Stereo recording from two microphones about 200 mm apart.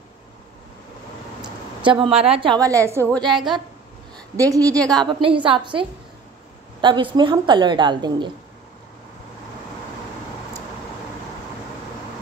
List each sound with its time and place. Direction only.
1.8 s a woman's voice: 25° right (ahead or behind)
3.2 s a woman's voice: centre (ahead or behind)
4.5 s a woman's voice: 15° right (ahead or behind)